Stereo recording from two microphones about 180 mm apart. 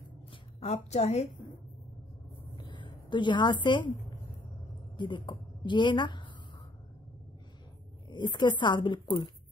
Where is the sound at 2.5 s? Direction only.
25° left (ahead or behind).